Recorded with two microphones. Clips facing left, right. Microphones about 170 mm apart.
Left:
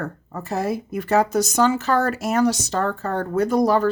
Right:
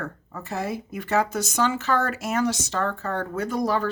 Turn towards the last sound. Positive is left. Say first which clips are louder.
# left 7 dB
turn(degrees=40)  # may be behind; listen again after turning